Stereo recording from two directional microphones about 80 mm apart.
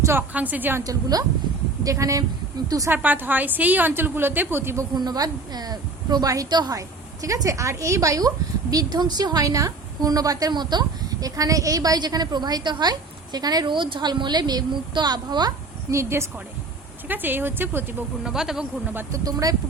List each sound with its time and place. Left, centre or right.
0.0 s a woman's voice: right
0.3 s a woman's voice: right
0.9 s a woman's voice: right
2.9 s a woman's voice: right
4.9 s a woman's voice: right
6.5 s a woman's voice: right
6.7 s a woman's voice: right
11.3 s a woman's voice: right
15.9 s a woman's voice: right
17.1 s a woman's voice: right
18.2 s speech: centre
19.1 s a woman's voice: right